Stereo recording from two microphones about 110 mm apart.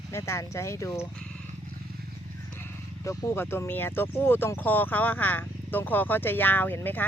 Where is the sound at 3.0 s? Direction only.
30° left (ahead or behind).